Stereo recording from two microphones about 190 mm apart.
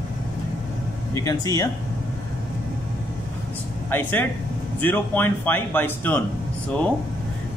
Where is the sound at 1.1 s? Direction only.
20° left (ahead or behind).